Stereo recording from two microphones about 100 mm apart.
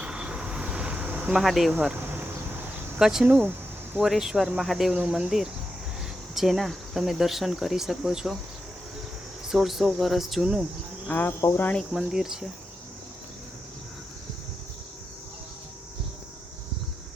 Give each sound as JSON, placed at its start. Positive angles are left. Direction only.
{"t": 0.0, "sound": "insect", "side_deg": -10}
{"t": 1.4, "sound": "speech", "side_deg": 0}
{"t": 2.0, "sound": "a sound", "side_deg": -20}
{"t": 3.0, "sound": "speech", "side_deg": -5}
{"t": 3.2, "sound": "speech", "side_deg": -15}
{"t": 4.0, "sound": "speech", "side_deg": -5}
{"t": 9.5, "sound": "speech", "side_deg": -5}
{"t": 11.1, "sound": "speech", "side_deg": 20}
{"t": 11.9, "sound": "speech", "side_deg": -5}